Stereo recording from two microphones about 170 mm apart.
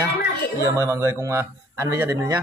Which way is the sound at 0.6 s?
20° right (ahead or behind).